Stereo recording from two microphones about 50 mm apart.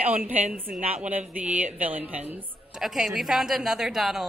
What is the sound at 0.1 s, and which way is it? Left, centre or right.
Speech, right.